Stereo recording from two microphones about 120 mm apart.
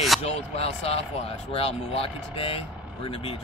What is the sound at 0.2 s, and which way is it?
Speech, 55° left (ahead or behind).